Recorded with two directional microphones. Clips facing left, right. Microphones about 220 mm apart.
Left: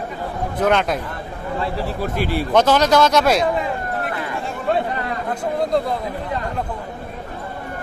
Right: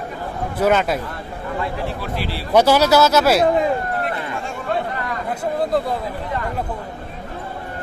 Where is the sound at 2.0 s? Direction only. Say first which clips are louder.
Left 5 dB; 50° left (ahead or behind).